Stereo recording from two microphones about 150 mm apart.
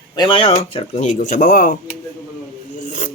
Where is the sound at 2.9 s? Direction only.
55° left (ahead or behind).